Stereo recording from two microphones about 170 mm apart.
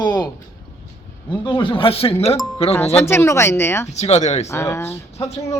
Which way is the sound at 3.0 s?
15° left (ahead or behind).